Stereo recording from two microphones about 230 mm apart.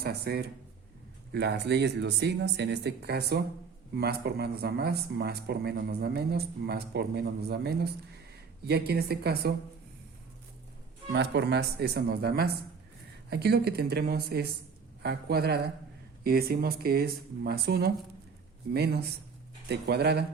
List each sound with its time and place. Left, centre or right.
0.0 s speech: right
11.1 s speech: right